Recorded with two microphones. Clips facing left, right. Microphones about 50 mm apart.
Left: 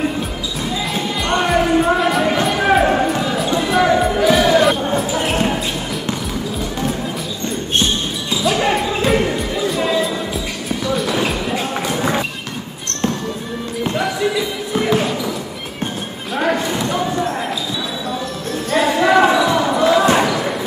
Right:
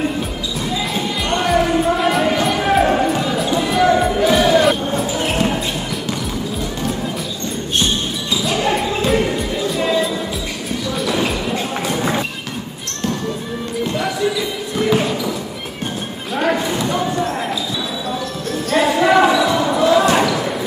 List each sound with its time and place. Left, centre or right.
0.9 s music: centre
2.4 s a sound: centre
3.8 s music: centre
4.9 s basketball bounce: centre
8.5 s music: centre
13.9 s basketball bounce: centre
16.3 s a sound: centre
18.7 s basketball bounce: centre